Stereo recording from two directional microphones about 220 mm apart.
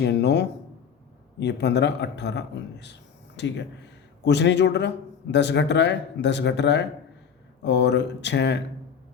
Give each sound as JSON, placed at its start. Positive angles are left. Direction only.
{"t": 0.0, "sound": "a man's voice", "side_deg": 50}